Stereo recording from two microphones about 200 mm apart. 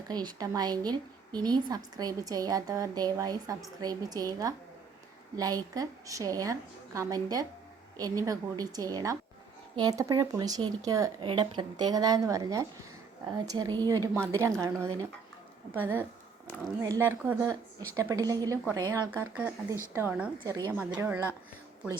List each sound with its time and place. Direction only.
0.1 s a woman's voice: 20° right (ahead or behind)
16.8 s a woman's voice: 15° right (ahead or behind)